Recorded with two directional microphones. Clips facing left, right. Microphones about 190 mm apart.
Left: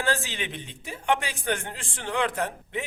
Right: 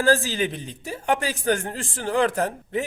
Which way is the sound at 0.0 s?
35° right (ahead or behind).